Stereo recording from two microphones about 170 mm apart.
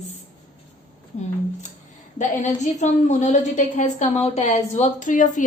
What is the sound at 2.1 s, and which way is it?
A woman's voice, 45° left (ahead or behind).